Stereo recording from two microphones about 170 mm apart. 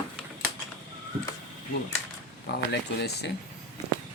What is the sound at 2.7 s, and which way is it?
Speech, 80° left.